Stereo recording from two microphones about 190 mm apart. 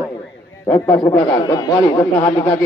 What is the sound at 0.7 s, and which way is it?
A man's voice, 20° left (ahead or behind).